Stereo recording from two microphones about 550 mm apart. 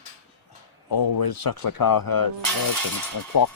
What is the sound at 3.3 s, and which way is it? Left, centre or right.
Speech, left.